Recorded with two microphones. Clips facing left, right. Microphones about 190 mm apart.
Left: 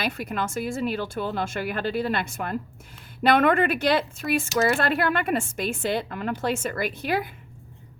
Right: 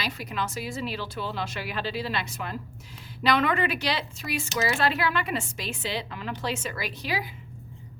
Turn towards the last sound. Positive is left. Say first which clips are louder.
# left 5 dB
turn(degrees=55)  # may be behind; listen again after turning